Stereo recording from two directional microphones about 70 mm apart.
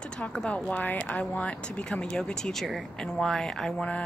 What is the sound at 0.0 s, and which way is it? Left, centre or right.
Speech, centre.